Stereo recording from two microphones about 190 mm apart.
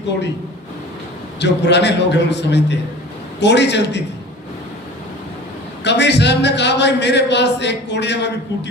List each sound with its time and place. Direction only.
1.4 s speech: 65° left (ahead or behind)
5.8 s speech: 65° left (ahead or behind)